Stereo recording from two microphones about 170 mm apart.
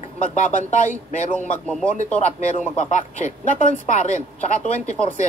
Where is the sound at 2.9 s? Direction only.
45° left (ahead or behind).